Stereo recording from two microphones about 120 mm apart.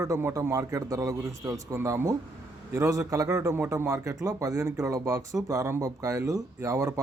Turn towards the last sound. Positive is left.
turn(degrees=-25)  # may be behind; listen again after turning